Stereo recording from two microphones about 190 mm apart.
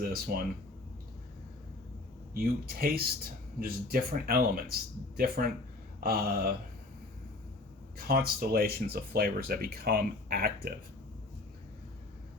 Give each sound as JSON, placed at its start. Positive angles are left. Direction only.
{"t": 0.0, "sound": "speech", "side_deg": -50}
{"t": 2.3, "sound": "speech", "side_deg": -50}
{"t": 7.9, "sound": "speech", "side_deg": -50}